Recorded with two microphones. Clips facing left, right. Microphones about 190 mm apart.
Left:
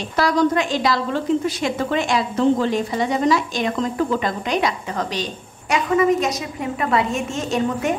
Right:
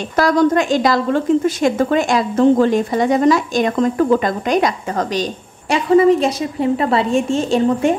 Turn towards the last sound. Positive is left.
turn(degrees=-30)  # may be behind; listen again after turning